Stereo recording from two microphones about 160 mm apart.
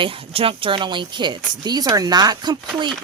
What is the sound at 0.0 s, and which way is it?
A woman's voice, 35° right (ahead or behind).